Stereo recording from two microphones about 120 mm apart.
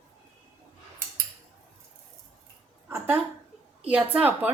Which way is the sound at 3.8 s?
10° right (ahead or behind).